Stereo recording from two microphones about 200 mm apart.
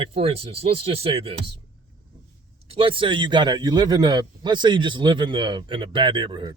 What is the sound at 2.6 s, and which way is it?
Speech, 25° right (ahead or behind).